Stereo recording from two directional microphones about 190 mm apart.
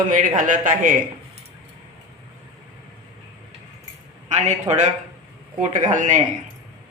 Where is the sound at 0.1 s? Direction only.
45° right (ahead or behind).